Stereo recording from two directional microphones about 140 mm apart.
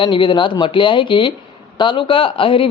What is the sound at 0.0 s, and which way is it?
Speech, 35° left (ahead or behind).